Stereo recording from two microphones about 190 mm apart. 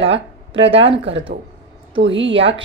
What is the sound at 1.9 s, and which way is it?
Speech, 75° right (ahead or behind).